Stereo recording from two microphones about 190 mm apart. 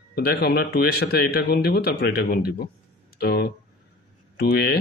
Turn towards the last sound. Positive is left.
turn(degrees=55)  # may be behind; listen again after turning